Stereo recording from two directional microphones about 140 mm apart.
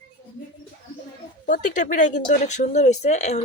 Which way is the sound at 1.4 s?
70° left (ahead or behind).